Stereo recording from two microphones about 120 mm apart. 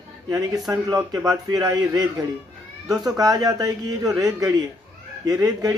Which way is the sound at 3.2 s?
30° right (ahead or behind).